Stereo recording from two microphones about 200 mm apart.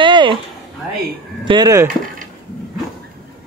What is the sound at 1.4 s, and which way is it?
Speech, 20° right (ahead or behind).